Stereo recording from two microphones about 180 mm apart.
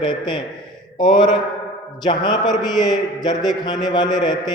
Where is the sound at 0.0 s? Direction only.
25° left (ahead or behind).